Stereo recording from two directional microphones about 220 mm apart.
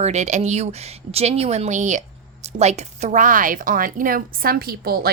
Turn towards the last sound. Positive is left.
turn(degrees=-45)  # may be behind; listen again after turning